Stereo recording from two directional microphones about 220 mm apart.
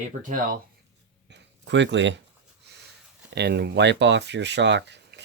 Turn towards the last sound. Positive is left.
turn(degrees=-50)  # may be behind; listen again after turning